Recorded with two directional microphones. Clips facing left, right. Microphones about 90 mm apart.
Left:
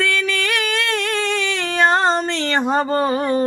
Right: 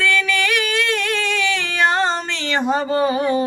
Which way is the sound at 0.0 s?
40° left (ahead or behind).